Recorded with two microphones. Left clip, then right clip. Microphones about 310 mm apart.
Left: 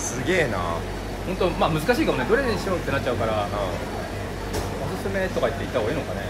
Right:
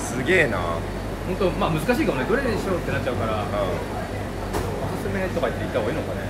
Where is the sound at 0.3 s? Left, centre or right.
Centre.